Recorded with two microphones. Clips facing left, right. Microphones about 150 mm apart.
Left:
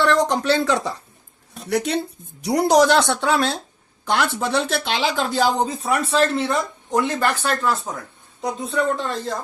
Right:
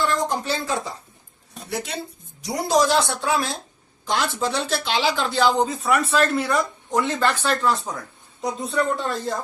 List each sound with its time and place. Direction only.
0.0 s speech: 75° left (ahead or behind)
1.7 s a woman's voice: 65° left (ahead or behind); by 5.5 s 45° left (ahead or behind)
6.1 s speech: 25° left (ahead or behind); by 9.3 s centre (ahead or behind)